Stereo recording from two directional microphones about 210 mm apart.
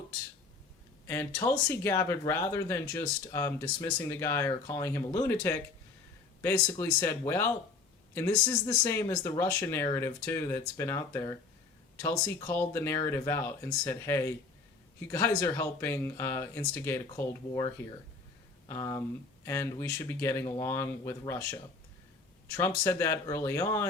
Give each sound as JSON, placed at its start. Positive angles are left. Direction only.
{"t": 1.0, "sound": "speech", "side_deg": 10}
{"t": 18.7, "sound": "speech", "side_deg": 15}